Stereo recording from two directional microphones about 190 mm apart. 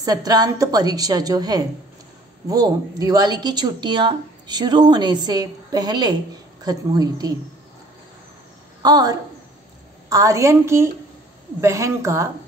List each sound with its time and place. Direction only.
0.0 s speech: 20° right (ahead or behind)
8.8 s a woman's voice: 20° right (ahead or behind)